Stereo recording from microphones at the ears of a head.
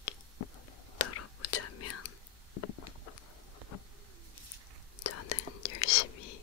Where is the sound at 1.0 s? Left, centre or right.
Left.